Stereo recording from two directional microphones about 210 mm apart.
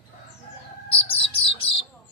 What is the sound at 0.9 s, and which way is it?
Bird, 25° left (ahead or behind).